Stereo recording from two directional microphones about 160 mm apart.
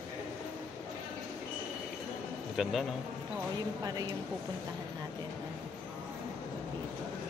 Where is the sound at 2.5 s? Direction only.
Centre (ahead or behind).